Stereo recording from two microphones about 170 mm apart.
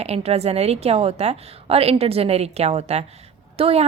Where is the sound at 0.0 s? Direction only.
40° right (ahead or behind).